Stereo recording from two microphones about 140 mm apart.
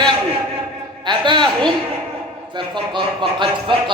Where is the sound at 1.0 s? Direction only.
35° right (ahead or behind).